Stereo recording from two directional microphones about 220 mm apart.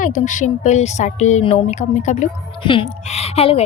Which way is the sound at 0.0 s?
35° left (ahead or behind).